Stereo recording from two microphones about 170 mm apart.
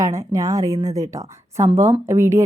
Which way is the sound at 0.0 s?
20° right (ahead or behind).